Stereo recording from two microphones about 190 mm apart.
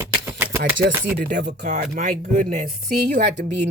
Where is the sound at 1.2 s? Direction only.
60° right (ahead or behind).